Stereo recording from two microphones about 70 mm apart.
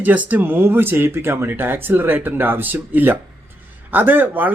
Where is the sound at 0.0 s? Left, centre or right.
Right.